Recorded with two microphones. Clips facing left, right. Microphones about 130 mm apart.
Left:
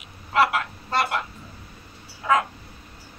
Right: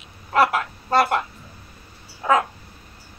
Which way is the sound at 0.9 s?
45° right (ahead or behind).